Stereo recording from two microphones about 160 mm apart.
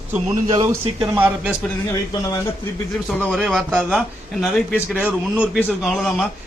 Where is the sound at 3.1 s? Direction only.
5° left (ahead or behind).